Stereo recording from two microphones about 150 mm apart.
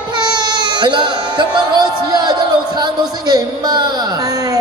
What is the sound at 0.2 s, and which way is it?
Baby cry, 30° right (ahead or behind).